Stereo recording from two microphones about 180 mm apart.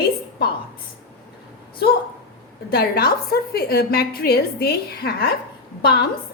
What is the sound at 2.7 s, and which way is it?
A woman's voice, 55° left (ahead or behind).